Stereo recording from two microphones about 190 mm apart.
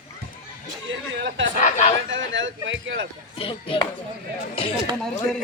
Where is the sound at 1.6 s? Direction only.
40° left (ahead or behind).